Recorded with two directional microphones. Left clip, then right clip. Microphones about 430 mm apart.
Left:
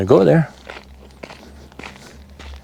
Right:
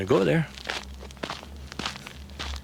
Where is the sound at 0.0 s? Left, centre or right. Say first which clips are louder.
Left 10 dB; left.